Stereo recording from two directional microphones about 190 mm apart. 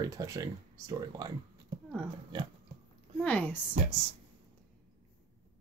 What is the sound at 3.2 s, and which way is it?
Speech, 5° left (ahead or behind).